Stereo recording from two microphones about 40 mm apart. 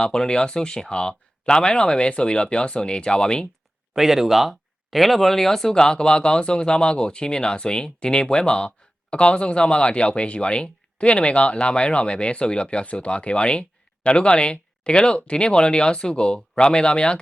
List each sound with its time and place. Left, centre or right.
0.0 s speech: centre
3.9 s speech: centre; by 17.2 s left